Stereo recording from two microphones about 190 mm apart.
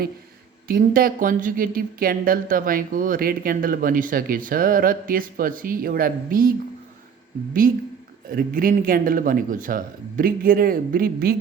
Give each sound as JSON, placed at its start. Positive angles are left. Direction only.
{"t": 0.7, "sound": "speech", "side_deg": -50}
{"t": 7.6, "sound": "speech", "side_deg": -45}